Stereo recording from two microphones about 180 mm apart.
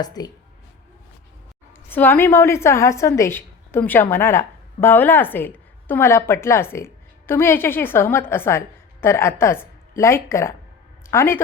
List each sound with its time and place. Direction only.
0.0 s speech: 20° left (ahead or behind)
1.9 s a woman's voice: 10° left (ahead or behind)